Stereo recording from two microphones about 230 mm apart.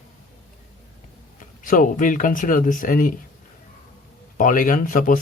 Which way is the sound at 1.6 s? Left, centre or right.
Left.